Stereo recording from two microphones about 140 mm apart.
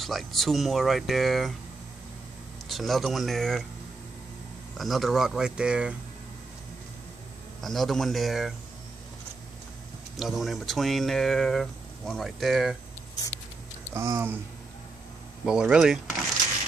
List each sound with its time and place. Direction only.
0.0 s speech: centre (ahead or behind)
2.7 s speech: centre (ahead or behind)
4.7 s speech: centre (ahead or behind)
7.6 s speech: centre (ahead or behind)
10.1 s speech: centre (ahead or behind)
13.9 s speech: 20° right (ahead or behind)
15.4 s speech: 5° right (ahead or behind)